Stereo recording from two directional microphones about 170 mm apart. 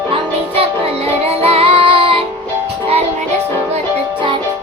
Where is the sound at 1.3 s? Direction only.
35° right (ahead or behind).